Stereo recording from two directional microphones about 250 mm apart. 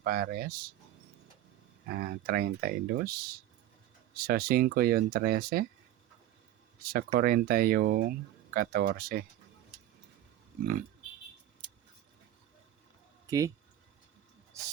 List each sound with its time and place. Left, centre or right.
0.0 s speech: right
1.9 s speech: right
6.8 s speech: right
13.2 s speech: centre
14.5 s rub: centre